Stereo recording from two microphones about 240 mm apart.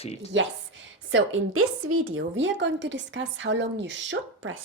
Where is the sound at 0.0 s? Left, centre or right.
Left.